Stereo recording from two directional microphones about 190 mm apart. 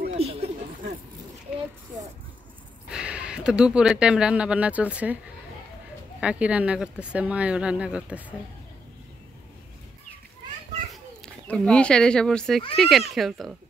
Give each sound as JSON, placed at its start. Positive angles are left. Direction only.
{"t": 0.1, "sound": "a sound", "side_deg": -30}
{"t": 2.9, "sound": "speech", "side_deg": -5}
{"t": 6.2, "sound": "speech", "side_deg": -5}
{"t": 11.4, "sound": "speech", "side_deg": 5}